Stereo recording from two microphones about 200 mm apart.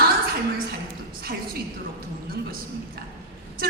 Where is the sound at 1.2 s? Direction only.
50° right (ahead or behind).